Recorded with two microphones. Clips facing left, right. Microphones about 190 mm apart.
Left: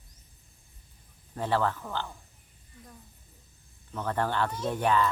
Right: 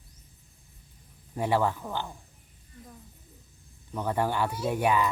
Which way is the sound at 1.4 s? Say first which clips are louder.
Right 2 dB; 15° right (ahead or behind).